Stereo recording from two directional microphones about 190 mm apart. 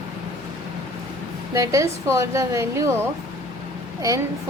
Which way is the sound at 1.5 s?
15° right (ahead or behind).